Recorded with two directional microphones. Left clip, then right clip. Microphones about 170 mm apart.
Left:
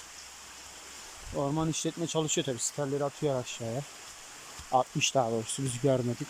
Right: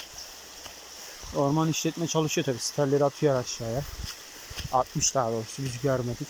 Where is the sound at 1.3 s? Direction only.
5° right (ahead or behind).